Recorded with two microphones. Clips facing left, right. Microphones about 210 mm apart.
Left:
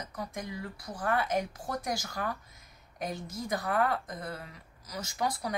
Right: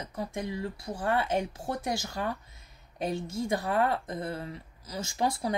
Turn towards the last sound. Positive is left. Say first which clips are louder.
# right 4 dB
turn(degrees=-25)  # may be behind; listen again after turning